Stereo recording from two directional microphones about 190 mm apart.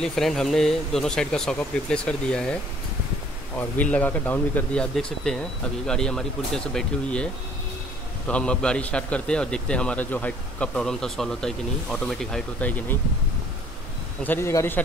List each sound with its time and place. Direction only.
0.0 s speech: centre (ahead or behind)
3.5 s speech: 10° left (ahead or behind)
8.3 s speech: 5° left (ahead or behind)
14.2 s a man's voice: 10° left (ahead or behind)